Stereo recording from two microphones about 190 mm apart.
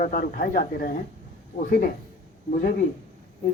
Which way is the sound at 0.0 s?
45° left (ahead or behind).